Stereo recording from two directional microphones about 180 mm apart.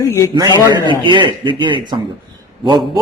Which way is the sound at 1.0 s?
25° right (ahead or behind).